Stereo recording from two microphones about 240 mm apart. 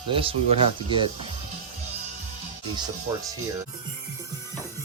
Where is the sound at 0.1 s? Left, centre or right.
Right.